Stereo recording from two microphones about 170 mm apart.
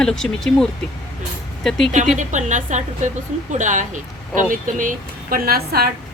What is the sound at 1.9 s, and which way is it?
Speech, 45° right (ahead or behind).